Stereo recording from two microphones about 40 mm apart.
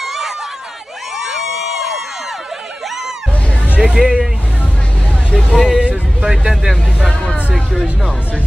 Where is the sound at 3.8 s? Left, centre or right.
Centre.